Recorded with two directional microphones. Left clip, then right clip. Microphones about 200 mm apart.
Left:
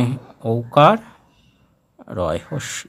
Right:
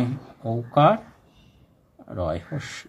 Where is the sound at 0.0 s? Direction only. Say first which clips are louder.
Left 5 dB; 40° left (ahead or behind).